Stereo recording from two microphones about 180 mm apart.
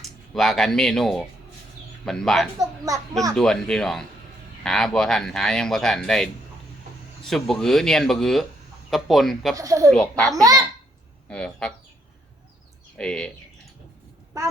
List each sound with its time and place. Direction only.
0.0 s speech: centre (ahead or behind)
2.6 s a child's voice: 20° right (ahead or behind)
3.3 s speech: 5° left (ahead or behind)
9.6 s speech: 20° right (ahead or behind)
9.9 s speech: 5° left (ahead or behind)
13.0 s speech: 5° left (ahead or behind)